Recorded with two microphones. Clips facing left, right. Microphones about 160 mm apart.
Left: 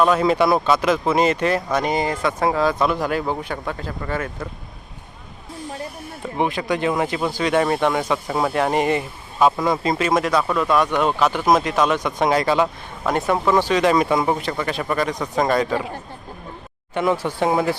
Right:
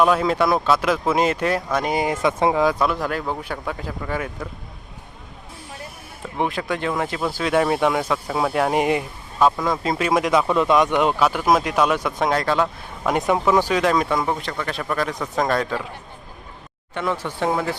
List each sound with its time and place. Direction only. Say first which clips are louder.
0.0 s speech: left 1 dB; centre (ahead or behind)
2.8 s speech: left 2 dB; centre (ahead or behind)
6.3 s speech: left 2 dB; centre (ahead or behind)
9.4 s speech: left 1 dB; 5° left (ahead or behind)
10.3 s speech: right 1 dB; 20° right (ahead or behind)
11.3 s speech: left 1 dB; 5° right (ahead or behind)
13.9 s speech: left 3 dB; 5° left (ahead or behind)
16.9 s speech: left 5 dB; 15° left (ahead or behind)